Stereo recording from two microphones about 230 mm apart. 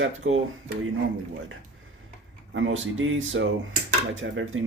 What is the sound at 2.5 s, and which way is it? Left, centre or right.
Speech, right.